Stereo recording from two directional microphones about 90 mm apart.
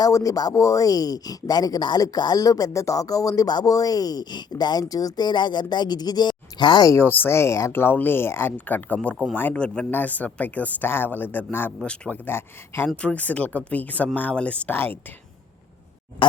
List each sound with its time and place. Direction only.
0.0 s speech: 40° left (ahead or behind); by 6.8 s 55° left (ahead or behind)
7.0 s speech: 25° left (ahead or behind)
9.6 s speech: 10° left (ahead or behind)